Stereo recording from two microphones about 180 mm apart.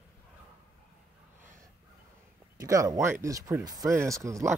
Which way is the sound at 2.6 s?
20° right (ahead or behind).